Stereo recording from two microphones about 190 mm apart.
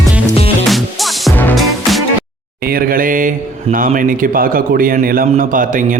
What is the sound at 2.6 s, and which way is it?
A man's voice, 50° right (ahead or behind).